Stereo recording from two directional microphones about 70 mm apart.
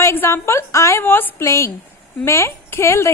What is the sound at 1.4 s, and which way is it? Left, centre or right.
A woman's voice, left.